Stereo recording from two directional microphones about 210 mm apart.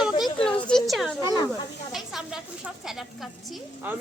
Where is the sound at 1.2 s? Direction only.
20° left (ahead or behind).